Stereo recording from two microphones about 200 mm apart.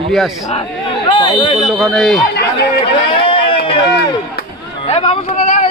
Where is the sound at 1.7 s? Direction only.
Centre (ahead or behind).